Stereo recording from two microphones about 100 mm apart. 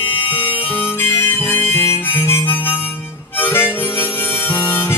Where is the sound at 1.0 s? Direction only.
20° left (ahead or behind).